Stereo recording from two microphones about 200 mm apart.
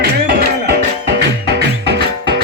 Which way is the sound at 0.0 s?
55° right (ahead or behind).